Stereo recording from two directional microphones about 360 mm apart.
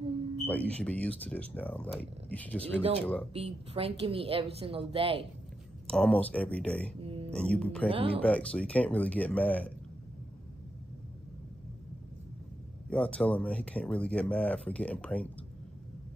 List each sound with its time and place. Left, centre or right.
0.5 s speech: centre
3.3 s a woman's voice: centre
5.9 s speech: centre
7.0 s music: centre
7.2 s speech: centre
7.9 s a woman's voice: centre
8.2 s speech: centre
12.9 s speech: centre